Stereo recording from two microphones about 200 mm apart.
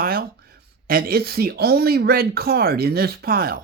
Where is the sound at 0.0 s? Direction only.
50° right (ahead or behind).